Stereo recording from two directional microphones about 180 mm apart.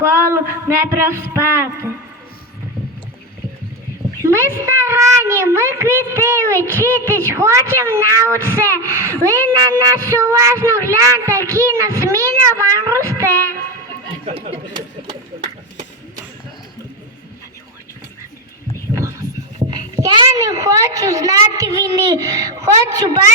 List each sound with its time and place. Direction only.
0.0 s a woman's voice: 15° right (ahead or behind)
4.2 s a woman's voice: 15° right (ahead or behind)
14.3 s speech: 35° right (ahead or behind)
15.0 s a sound: 40° right (ahead or behind)
18.9 s a sound: 15° right (ahead or behind)
19.5 s a child's voice: 25° right (ahead or behind)